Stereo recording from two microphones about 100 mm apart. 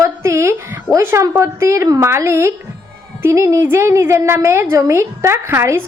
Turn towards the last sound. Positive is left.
turn(degrees=-25)  # may be behind; listen again after turning